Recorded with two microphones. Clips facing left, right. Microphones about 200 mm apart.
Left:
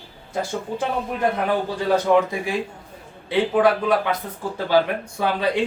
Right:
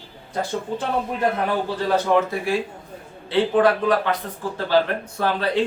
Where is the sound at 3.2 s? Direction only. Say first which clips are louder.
Even; 10° left (ahead or behind).